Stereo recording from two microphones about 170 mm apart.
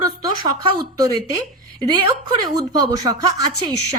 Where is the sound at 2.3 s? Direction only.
20° right (ahead or behind).